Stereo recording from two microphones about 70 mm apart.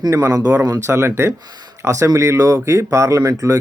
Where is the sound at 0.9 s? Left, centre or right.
Right.